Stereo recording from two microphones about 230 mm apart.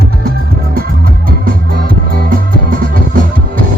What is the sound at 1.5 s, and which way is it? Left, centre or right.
Music, right.